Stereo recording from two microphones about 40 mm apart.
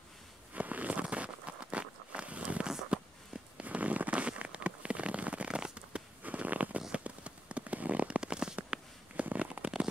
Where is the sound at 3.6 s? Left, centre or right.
Right.